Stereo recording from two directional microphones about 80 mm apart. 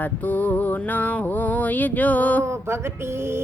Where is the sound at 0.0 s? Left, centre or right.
Centre.